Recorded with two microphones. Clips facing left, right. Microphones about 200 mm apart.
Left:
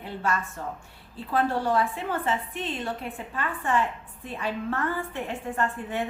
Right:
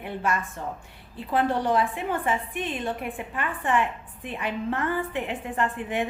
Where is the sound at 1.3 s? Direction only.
15° right (ahead or behind).